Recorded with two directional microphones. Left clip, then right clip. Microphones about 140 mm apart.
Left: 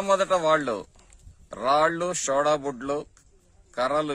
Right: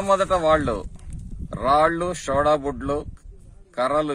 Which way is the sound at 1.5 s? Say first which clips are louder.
Right 3 dB; 15° left (ahead or behind).